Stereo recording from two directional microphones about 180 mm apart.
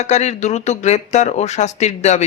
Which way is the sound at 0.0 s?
40° left (ahead or behind).